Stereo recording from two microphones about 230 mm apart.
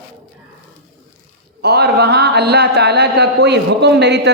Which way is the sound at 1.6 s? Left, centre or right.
Right.